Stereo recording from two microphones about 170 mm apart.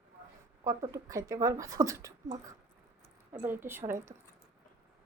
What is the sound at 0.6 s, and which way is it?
Speech, 20° right (ahead or behind).